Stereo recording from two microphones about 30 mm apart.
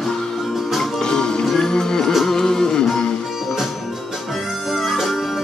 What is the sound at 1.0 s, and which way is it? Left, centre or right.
Music, left.